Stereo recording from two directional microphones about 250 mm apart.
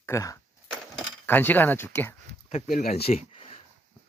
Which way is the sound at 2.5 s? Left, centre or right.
Left.